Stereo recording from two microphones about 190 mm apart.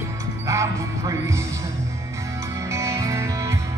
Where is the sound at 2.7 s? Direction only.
15° right (ahead or behind).